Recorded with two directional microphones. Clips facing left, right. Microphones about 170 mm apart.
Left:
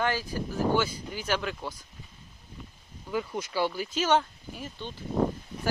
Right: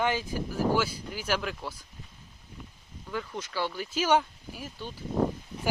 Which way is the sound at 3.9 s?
10° right (ahead or behind).